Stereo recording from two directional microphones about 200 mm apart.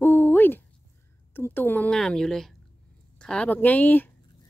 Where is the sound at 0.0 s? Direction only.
10° left (ahead or behind).